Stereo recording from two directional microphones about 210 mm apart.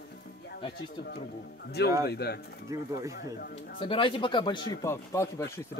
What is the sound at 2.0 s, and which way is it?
Speech, 50° left (ahead or behind).